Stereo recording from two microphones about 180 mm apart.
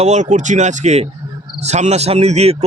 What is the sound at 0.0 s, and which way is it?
Speech, 40° right (ahead or behind).